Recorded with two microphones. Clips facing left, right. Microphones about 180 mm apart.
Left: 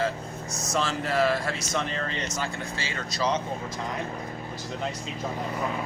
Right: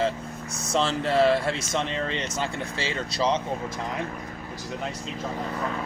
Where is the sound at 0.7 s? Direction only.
30° right (ahead or behind).